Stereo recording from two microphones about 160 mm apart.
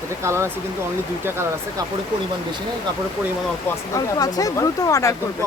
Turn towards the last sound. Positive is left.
turn(degrees=20)  # may be behind; listen again after turning